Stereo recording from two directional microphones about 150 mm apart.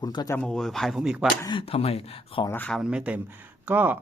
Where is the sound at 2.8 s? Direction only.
5° right (ahead or behind).